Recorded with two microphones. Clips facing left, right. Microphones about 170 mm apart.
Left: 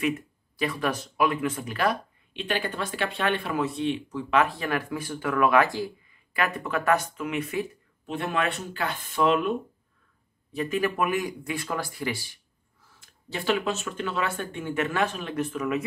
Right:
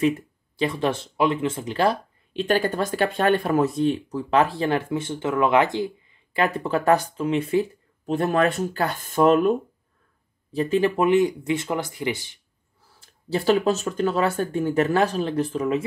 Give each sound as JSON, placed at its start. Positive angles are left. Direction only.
{"t": 0.6, "sound": "speech", "side_deg": -25}
{"t": 10.5, "sound": "speech", "side_deg": -30}
{"t": 12.8, "sound": "speech", "side_deg": -35}